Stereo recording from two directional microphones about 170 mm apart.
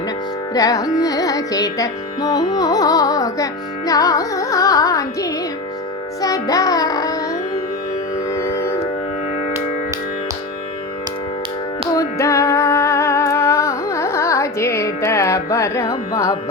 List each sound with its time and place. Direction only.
0.5 s carnatic music: 20° left (ahead or behind)
6.2 s music: 20° left (ahead or behind)
8.3 s a sound: 15° left (ahead or behind)
11.9 s music: 15° left (ahead or behind)